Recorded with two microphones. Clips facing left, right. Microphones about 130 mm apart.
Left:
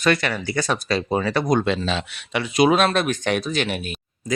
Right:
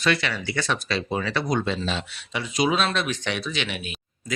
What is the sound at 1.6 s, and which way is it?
Speech, 85° left.